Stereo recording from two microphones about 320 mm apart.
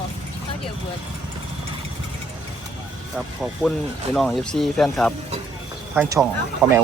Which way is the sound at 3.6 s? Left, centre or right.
Centre.